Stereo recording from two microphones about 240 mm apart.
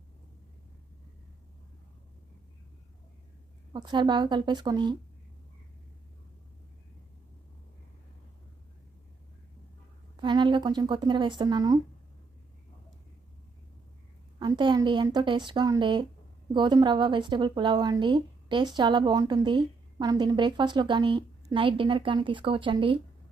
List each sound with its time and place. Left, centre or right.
3.7 s a woman's voice: centre
10.2 s speech: centre
14.3 s speech: centre